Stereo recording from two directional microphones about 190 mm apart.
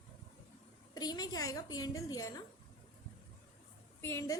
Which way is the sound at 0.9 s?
20° left (ahead or behind).